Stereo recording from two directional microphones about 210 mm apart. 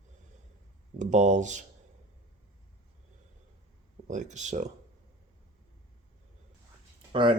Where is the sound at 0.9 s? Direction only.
35° right (ahead or behind).